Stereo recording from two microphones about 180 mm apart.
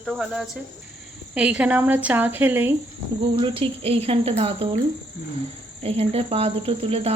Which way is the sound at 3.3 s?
30° right (ahead or behind).